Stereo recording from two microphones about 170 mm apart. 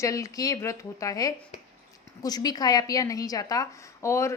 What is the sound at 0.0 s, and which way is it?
A woman's voice, 20° left (ahead or behind).